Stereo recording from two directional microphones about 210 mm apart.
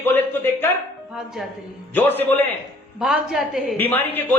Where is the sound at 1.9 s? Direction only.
10° left (ahead or behind).